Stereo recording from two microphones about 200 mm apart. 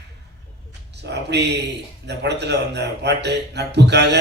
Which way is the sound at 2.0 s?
60° right (ahead or behind).